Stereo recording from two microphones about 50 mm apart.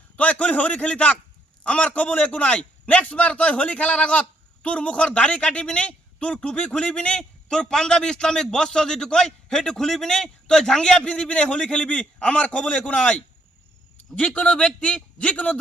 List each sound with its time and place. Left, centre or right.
0.2 s a man's voice: left